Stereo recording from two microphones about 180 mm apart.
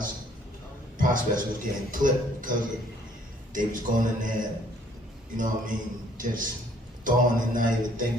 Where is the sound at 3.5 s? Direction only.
45° right (ahead or behind).